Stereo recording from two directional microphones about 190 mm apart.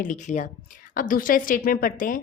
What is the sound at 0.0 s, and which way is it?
A woman's voice, 40° left (ahead or behind).